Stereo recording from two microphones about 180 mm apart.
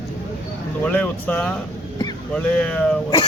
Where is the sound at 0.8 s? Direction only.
10° left (ahead or behind).